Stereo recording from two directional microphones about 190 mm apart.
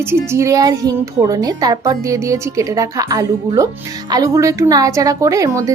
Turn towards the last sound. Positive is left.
turn(degrees=-15)  # may be behind; listen again after turning